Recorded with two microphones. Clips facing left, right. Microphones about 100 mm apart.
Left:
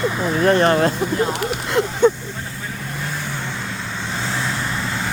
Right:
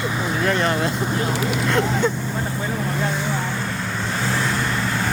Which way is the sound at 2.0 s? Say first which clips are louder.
Left 7 dB; 25° left (ahead or behind).